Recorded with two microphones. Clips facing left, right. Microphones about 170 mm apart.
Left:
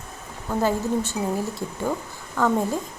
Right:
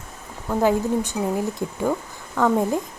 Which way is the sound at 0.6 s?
15° right (ahead or behind).